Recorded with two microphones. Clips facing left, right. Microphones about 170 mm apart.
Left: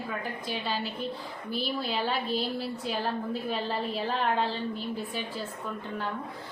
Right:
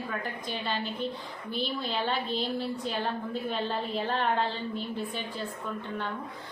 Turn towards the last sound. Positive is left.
turn(degrees=0)  # may be behind; listen again after turning